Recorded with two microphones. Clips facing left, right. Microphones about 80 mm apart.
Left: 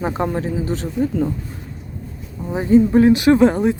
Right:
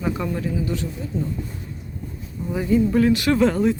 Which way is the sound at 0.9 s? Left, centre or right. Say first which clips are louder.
Left 9 dB; left.